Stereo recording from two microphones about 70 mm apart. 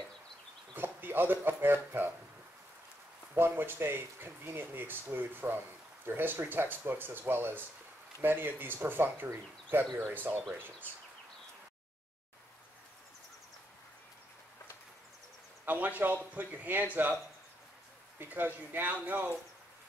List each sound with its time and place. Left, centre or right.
0.7 s speech: right
3.3 s speech: right
15.6 s speech: right
18.2 s speech: right